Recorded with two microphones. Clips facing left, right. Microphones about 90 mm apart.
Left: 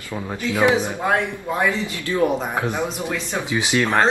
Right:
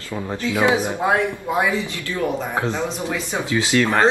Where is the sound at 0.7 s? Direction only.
15° right (ahead or behind).